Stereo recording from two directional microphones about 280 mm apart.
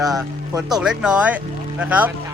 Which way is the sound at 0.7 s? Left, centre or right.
Centre.